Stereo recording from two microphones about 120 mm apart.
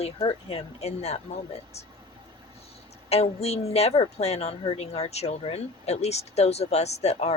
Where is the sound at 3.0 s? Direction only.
60° left (ahead or behind).